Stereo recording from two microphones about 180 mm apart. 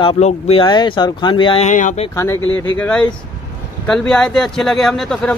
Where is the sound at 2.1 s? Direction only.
15° left (ahead or behind).